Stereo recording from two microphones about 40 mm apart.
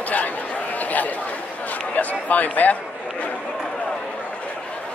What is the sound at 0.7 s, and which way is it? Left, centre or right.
Chatter, left.